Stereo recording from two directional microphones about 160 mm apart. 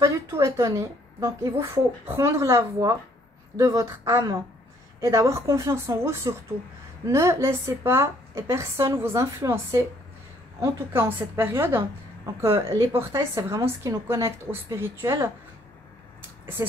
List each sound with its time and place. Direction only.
0.0 s a woman's voice: 20° right (ahead or behind)